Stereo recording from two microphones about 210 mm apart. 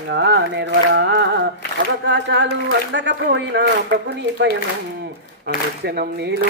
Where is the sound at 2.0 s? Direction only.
55° right (ahead or behind).